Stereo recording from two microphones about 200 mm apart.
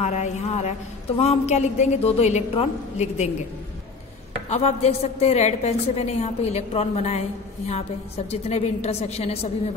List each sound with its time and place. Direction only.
0.0 s a sound: 35° left (ahead or behind)
1.2 s a woman's voice: 30° left (ahead or behind)
4.5 s a woman's voice: 30° left (ahead or behind)